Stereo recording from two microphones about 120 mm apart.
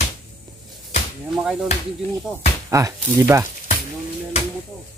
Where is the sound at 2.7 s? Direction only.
30° right (ahead or behind).